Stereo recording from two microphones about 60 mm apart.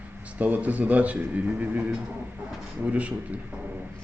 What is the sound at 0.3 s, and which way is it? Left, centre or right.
Speech, right.